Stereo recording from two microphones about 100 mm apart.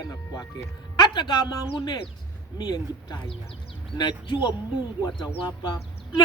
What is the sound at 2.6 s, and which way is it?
Speech, 45° left (ahead or behind).